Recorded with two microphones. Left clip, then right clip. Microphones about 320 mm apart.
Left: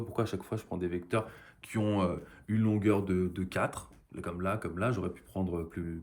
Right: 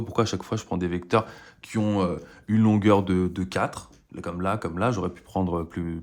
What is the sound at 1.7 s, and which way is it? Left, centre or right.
Speech, centre.